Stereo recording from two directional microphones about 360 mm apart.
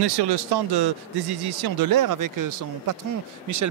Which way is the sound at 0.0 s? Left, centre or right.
Right.